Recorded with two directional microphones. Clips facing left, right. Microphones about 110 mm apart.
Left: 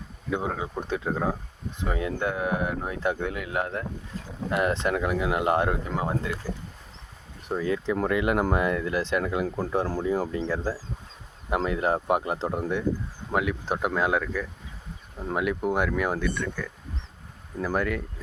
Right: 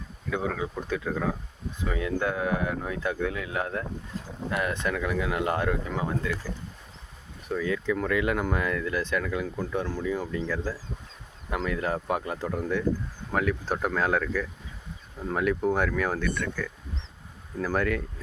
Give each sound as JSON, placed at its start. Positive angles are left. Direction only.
{"t": 0.3, "sound": "speech", "side_deg": 25}
{"t": 7.5, "sound": "speech", "side_deg": 30}
{"t": 9.6, "sound": "speech", "side_deg": 35}
{"t": 13.3, "sound": "speech", "side_deg": 10}